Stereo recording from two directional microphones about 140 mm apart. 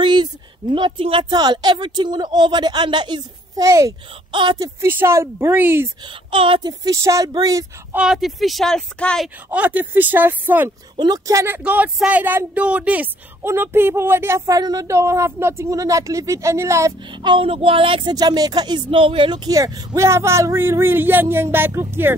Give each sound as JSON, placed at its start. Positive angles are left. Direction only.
{"t": 0.0, "sound": "a woman's voice", "side_deg": -35}
{"t": 4.3, "sound": "a woman's voice", "side_deg": -35}
{"t": 4.8, "sound": "speech", "side_deg": -15}
{"t": 6.3, "sound": "speech", "side_deg": -40}
{"t": 7.9, "sound": "speech", "side_deg": -5}
{"t": 9.5, "sound": "speech", "side_deg": -10}
{"t": 11.0, "sound": "speech", "side_deg": -25}
{"t": 17.2, "sound": "speech", "side_deg": -35}